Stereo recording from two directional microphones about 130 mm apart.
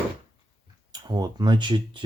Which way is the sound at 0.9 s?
30° right (ahead or behind).